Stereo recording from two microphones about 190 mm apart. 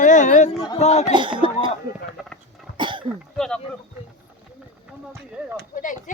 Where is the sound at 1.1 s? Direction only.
25° right (ahead or behind).